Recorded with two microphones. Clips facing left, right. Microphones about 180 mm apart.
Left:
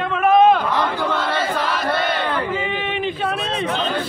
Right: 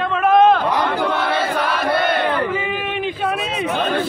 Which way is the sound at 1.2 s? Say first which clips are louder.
Right 2 dB; 60° right (ahead or behind).